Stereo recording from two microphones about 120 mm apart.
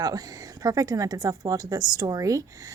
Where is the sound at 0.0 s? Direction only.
30° right (ahead or behind).